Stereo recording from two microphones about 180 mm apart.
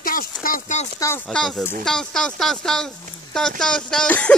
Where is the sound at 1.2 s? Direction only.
5° left (ahead or behind).